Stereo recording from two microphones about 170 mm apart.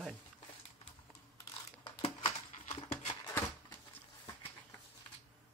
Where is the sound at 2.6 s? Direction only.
45° left (ahead or behind).